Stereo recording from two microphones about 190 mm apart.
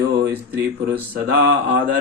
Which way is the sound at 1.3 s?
55° right (ahead or behind).